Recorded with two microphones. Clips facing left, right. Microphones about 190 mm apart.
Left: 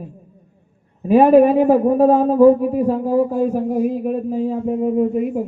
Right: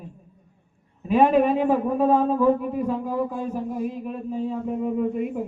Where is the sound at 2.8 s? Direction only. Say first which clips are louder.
Left 9 dB; 40° left (ahead or behind).